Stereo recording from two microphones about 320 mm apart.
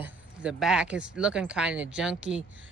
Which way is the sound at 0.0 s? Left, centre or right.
Centre.